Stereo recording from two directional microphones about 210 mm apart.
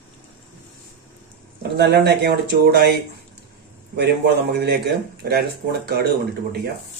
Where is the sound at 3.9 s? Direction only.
55° right (ahead or behind).